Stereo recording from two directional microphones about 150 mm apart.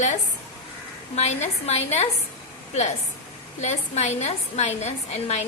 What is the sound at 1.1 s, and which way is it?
Speech, 45° left (ahead or behind).